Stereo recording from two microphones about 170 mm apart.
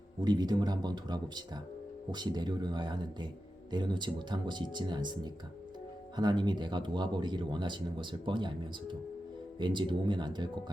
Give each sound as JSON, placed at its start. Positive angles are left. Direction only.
{"t": 0.2, "sound": "speech", "side_deg": -25}